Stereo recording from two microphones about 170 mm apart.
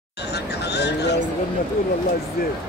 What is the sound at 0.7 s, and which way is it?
Vehicle, 80° left.